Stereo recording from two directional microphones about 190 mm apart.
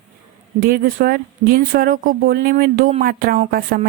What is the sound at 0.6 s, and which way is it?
Speech, 45° right (ahead or behind).